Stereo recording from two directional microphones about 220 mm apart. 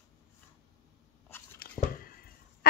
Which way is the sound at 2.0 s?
40° left (ahead or behind).